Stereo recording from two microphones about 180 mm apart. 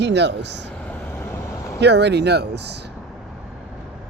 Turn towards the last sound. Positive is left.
turn(degrees=-70)  # may be behind; listen again after turning